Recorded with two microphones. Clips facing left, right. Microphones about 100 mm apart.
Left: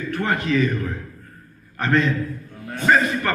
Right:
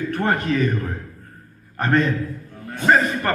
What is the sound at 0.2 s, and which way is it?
Speech, 45° right (ahead or behind).